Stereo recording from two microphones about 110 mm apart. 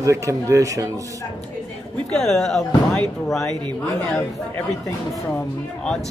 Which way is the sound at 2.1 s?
5° left (ahead or behind).